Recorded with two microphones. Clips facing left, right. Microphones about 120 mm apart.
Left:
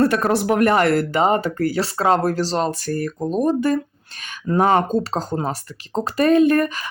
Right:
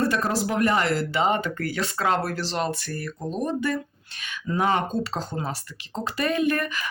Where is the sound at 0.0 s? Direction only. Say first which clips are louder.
Left 6 dB; 60° left (ahead or behind).